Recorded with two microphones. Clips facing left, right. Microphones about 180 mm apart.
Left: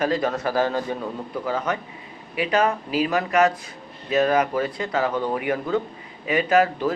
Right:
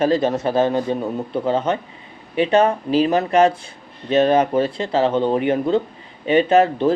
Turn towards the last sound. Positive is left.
turn(degrees=-25)  # may be behind; listen again after turning